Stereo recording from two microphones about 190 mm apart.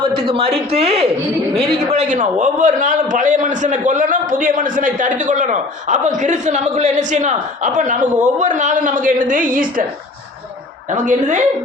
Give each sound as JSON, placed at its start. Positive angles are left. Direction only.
{"t": 0.2, "sound": "a man's voice", "side_deg": -30}
{"t": 10.9, "sound": "a woman's voice", "side_deg": -40}